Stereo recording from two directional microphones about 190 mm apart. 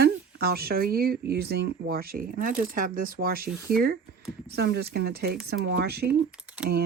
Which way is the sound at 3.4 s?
5° right (ahead or behind).